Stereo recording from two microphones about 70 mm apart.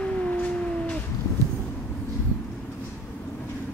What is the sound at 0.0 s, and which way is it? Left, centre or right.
Howl, centre.